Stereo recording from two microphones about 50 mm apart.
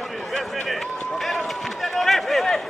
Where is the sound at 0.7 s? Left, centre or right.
Centre.